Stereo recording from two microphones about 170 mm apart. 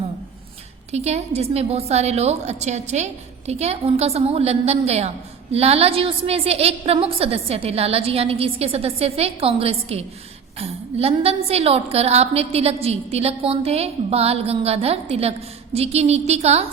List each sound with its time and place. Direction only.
0.9 s a woman's voice: 40° right (ahead or behind)